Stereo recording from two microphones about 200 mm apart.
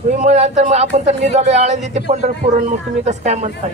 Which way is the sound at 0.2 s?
35° right (ahead or behind).